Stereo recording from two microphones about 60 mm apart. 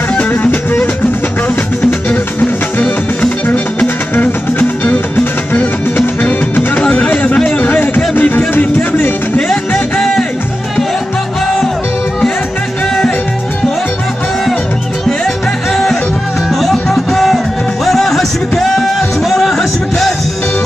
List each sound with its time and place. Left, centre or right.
0.4 s music: left
3.4 s music: left
6.8 s a sound: left
7.8 s music: left
9.9 s music: centre
15.7 s music: centre